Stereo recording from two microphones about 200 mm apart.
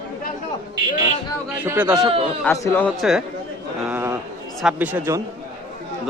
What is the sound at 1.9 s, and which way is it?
Speech, 25° right (ahead or behind).